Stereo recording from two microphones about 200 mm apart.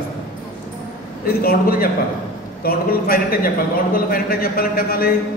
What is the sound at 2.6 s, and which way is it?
A man's voice, 45° left (ahead or behind).